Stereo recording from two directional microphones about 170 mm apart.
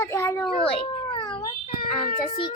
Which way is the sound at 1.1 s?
25° left (ahead or behind).